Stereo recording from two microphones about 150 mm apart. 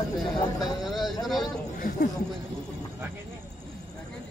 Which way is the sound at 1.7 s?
65° left (ahead or behind).